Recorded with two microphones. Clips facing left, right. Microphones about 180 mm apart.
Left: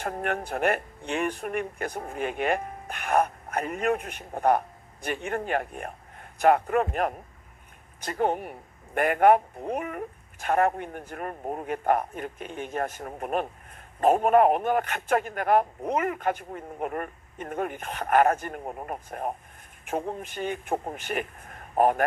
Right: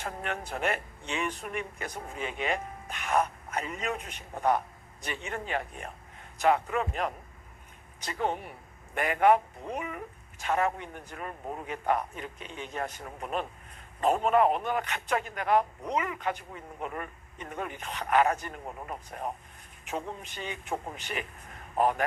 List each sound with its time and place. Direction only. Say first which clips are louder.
0.0 s a man's voice: left 6 dB; 55° left (ahead or behind)